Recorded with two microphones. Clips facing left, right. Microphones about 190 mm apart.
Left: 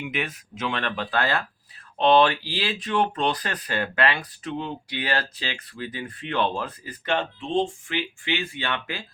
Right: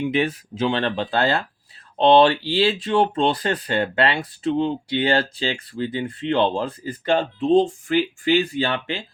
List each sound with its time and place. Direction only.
0.0 s speech: 30° right (ahead or behind)